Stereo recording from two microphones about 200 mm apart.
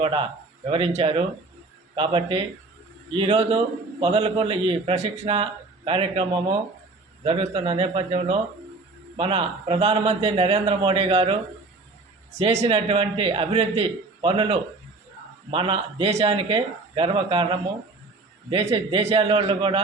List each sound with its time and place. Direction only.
0.0 s a man's voice: 25° right (ahead or behind)
12.6 s a man's voice: 25° right (ahead or behind)